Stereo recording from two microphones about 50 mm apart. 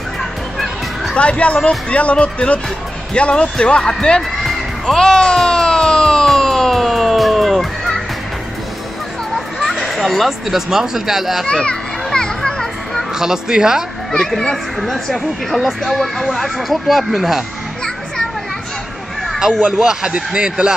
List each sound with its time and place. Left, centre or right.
1.1 s speech: left
4.4 s music: centre
9.6 s speech: centre
11.4 s children playing: centre
13.2 s speech: centre
14.1 s a child's voice: centre
19.2 s a sound: centre
19.6 s speech: centre